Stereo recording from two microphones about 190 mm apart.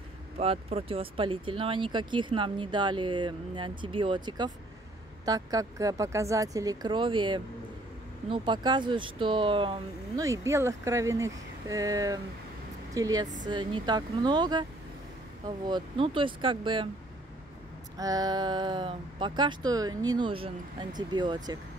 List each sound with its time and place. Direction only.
0.4 s speech: 30° right (ahead or behind)
10.2 s speech: 15° right (ahead or behind)
17.9 s speech: 20° right (ahead or behind)